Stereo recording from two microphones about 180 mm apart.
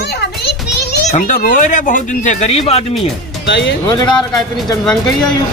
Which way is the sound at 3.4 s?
75° left (ahead or behind).